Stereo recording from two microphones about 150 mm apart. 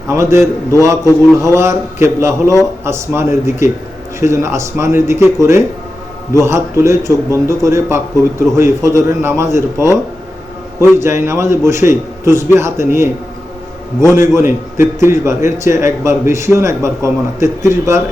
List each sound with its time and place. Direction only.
0.1 s a man's voice: 20° right (ahead or behind)